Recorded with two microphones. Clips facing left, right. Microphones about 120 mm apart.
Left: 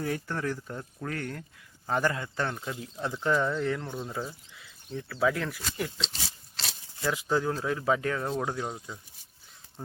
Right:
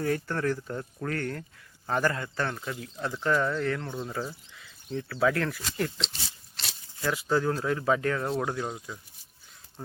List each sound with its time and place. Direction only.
0.0 s speech: 10° left (ahead or behind)
7.0 s speech: 15° left (ahead or behind)